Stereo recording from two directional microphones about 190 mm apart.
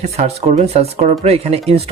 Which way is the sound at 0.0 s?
35° right (ahead or behind).